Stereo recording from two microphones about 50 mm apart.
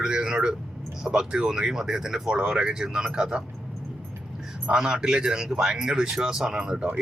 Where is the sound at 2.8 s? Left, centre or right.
Centre.